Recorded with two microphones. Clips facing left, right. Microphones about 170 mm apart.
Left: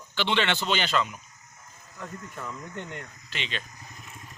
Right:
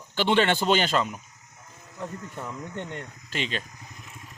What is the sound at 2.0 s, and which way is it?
Speech, 20° right (ahead or behind).